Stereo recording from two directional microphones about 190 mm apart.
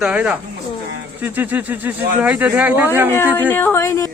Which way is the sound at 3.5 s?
10° left (ahead or behind).